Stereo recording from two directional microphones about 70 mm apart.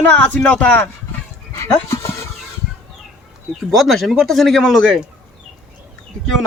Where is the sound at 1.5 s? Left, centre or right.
Left.